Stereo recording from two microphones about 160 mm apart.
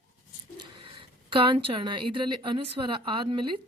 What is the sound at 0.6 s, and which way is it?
Speech, 30° right (ahead or behind).